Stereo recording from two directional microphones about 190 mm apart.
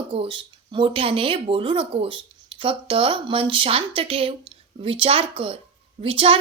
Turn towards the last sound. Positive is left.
turn(degrees=-30)  # may be behind; listen again after turning